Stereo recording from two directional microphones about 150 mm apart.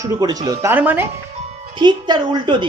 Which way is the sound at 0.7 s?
10° right (ahead or behind).